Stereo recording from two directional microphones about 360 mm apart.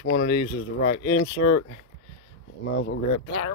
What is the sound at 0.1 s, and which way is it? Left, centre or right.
Speech, left.